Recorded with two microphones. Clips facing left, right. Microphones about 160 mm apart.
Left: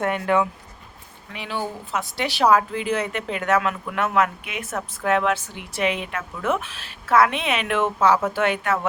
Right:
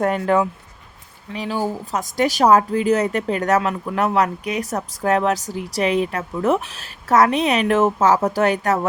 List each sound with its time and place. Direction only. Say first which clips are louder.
0.0 s speech: right 3 dB; 35° right (ahead or behind)